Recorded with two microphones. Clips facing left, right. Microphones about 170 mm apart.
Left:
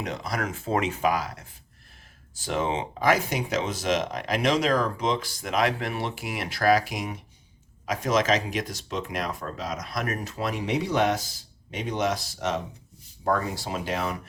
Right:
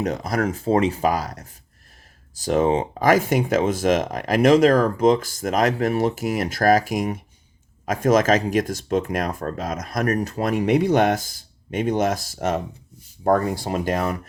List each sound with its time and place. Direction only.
0.0 s speech: 45° right (ahead or behind)